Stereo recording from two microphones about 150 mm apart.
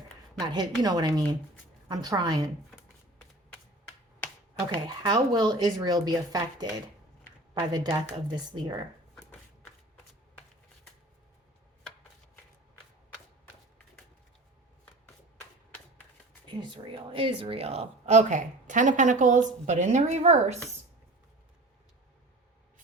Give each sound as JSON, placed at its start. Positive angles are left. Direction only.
{"t": 0.3, "sound": "speech", "side_deg": -30}
{"t": 5.0, "sound": "speech", "side_deg": -30}
{"t": 7.7, "sound": "speech", "side_deg": -30}
{"t": 16.5, "sound": "a woman's voice", "side_deg": -30}